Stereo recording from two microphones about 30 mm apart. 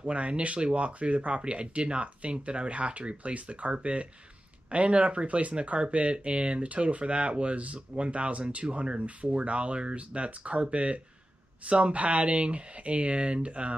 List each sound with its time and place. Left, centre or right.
0.0 s speech: right
8.6 s speech: right